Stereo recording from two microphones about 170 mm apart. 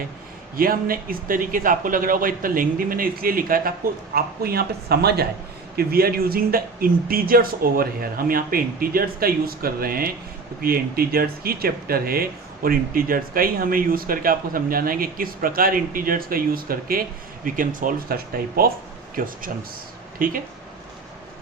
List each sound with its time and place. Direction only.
0.5 s speech: 60° right (ahead or behind)